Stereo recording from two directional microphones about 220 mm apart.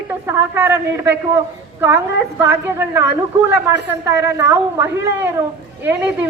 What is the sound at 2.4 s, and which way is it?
A woman's voice, 10° right (ahead or behind).